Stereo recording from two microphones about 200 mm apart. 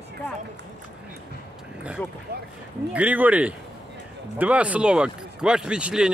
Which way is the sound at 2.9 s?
10° right (ahead or behind).